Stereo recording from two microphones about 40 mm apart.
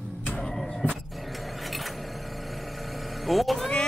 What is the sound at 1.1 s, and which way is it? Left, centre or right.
Sewing machine, centre.